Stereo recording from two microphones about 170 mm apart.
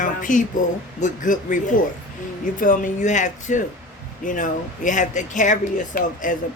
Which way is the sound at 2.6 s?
50° left (ahead or behind).